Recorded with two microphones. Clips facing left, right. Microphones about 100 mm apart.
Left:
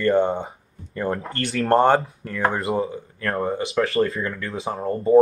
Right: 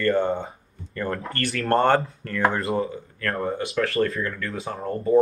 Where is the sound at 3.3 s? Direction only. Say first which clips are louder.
Left 3 dB; 30° left (ahead or behind).